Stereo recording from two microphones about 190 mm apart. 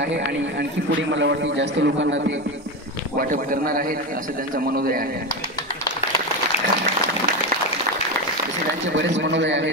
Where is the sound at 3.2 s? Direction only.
45° right (ahead or behind).